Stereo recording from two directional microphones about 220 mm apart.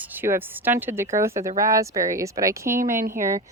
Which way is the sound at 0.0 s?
10° right (ahead or behind).